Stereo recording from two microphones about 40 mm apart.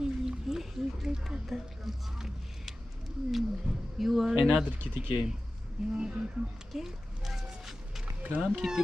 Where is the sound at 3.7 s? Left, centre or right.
Centre.